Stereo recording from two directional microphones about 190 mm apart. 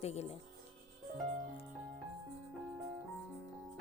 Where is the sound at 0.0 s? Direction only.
35° left (ahead or behind).